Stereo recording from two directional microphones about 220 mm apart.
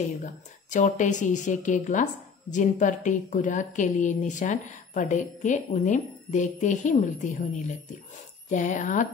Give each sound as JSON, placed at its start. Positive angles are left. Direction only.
{"t": 0.2, "sound": "a woman's voice", "side_deg": 35}